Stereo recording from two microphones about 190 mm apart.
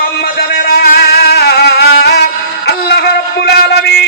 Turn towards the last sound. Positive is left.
turn(degrees=60)  # may be behind; listen again after turning